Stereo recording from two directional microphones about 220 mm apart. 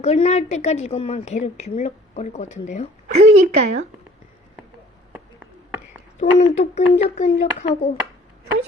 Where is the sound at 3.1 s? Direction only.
30° right (ahead or behind).